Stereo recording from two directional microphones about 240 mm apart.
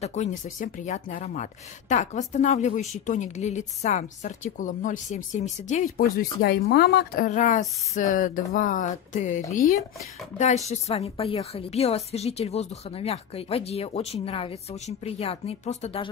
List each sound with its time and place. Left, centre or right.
0.0 s a woman's voice: left
6.4 s a woman's voice: left